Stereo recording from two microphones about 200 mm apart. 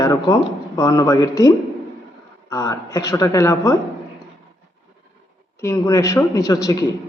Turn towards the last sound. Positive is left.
turn(degrees=15)  # may be behind; listen again after turning